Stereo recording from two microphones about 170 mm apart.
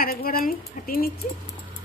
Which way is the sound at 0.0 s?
60° left (ahead or behind).